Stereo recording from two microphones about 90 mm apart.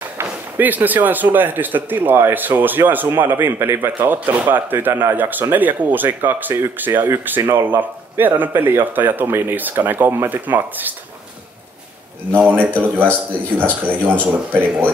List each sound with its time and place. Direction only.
0.2 s speech: 20° right (ahead or behind)
12.3 s speech: 20° right (ahead or behind)